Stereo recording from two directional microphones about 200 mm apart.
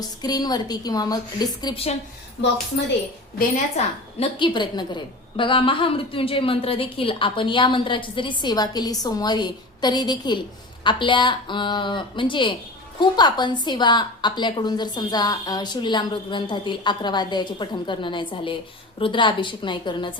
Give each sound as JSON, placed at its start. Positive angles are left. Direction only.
{"t": 0.2, "sound": "a woman's voice", "side_deg": 20}
{"t": 3.8, "sound": "a woman's voice", "side_deg": 25}